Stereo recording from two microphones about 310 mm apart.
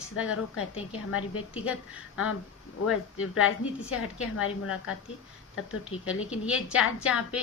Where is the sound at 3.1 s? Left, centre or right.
Left.